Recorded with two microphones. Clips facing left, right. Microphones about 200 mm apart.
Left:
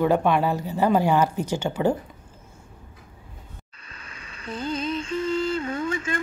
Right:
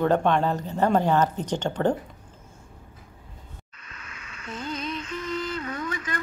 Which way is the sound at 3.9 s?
30° left (ahead or behind).